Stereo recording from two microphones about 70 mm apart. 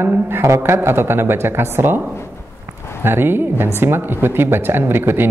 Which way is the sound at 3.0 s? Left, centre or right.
Right.